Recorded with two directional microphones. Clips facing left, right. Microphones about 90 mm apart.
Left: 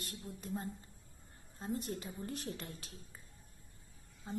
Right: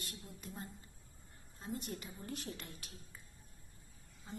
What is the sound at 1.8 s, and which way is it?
A woman's voice, 35° left (ahead or behind).